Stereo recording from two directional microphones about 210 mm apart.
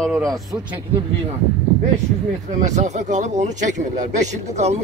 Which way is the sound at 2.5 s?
35° right (ahead or behind).